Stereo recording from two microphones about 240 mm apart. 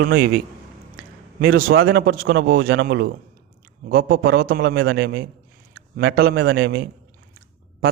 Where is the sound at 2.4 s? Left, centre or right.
Right.